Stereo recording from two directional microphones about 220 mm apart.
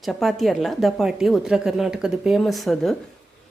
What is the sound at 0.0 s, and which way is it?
A woman's voice, centre (ahead or behind).